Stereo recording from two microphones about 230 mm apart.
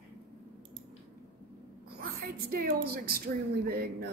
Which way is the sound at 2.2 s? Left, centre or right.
Right.